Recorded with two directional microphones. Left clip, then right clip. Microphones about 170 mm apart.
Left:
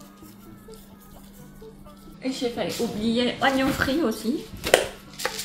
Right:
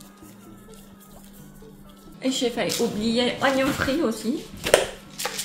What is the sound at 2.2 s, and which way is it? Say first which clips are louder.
A woman's voice: right 3 dB; 55° right (ahead or behind).